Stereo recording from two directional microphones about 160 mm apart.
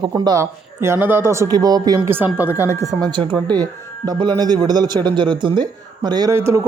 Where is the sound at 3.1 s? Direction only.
30° right (ahead or behind).